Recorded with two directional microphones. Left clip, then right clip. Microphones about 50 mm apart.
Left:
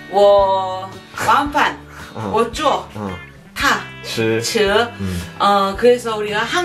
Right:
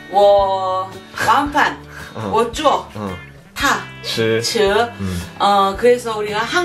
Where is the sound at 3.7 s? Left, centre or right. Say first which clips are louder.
Even; right.